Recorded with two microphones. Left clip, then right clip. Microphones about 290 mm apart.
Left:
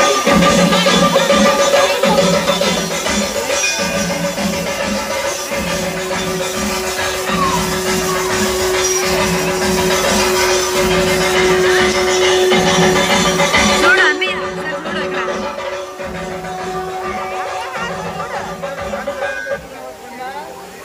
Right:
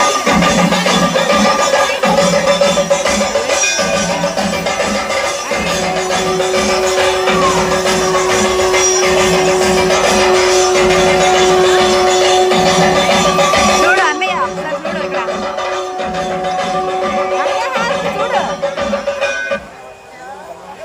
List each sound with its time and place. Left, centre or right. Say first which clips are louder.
0.0 s music: even; centre
11.3 s music: right 3 dB; right
13.9 s music: even; centre